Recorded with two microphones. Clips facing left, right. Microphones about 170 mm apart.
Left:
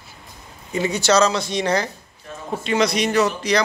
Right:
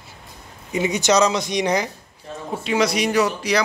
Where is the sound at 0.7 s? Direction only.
15° right (ahead or behind).